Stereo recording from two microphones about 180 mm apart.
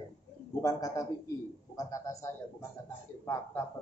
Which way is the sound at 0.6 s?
20° left (ahead or behind).